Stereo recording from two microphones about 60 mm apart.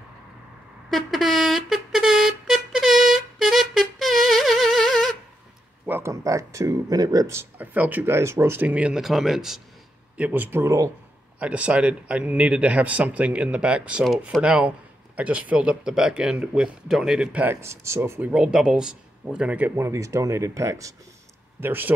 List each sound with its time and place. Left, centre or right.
0.8 s a sound: centre
6.0 s a sound: right
7.5 s speech: right
8.0 s speech: right
8.6 s speech: right
8.9 s speech: centre
10.1 s speech: right
10.6 s speech: right
11.3 s speech: right
17.6 s speech: right
18.3 s speech: centre
19.7 s speech: right
21.5 s speech: right